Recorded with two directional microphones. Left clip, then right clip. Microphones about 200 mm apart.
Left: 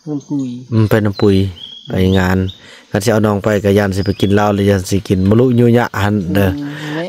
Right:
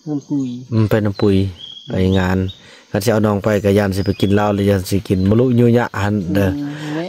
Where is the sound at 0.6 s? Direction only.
10° left (ahead or behind).